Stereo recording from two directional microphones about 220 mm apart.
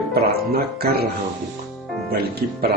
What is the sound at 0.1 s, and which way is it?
Speech, 45° right (ahead or behind).